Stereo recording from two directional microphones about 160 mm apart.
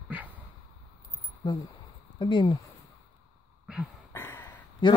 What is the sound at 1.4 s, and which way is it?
Speech, 25° left (ahead or behind).